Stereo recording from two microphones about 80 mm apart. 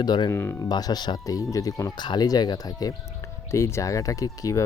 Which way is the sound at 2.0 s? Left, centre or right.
Left.